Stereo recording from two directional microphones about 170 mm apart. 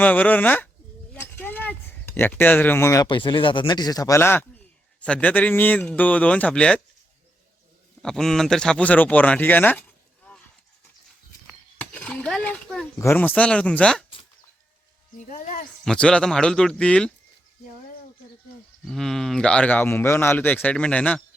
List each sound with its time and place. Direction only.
0.0 s speech: 10° left (ahead or behind)
8.0 s speech: 5° left (ahead or behind)
11.4 s a sound: 10° left (ahead or behind)
13.0 s speech: 10° left (ahead or behind)
15.3 s speech: 50° left (ahead or behind)
15.8 s speech: 5° left (ahead or behind)
18.9 s speech: centre (ahead or behind)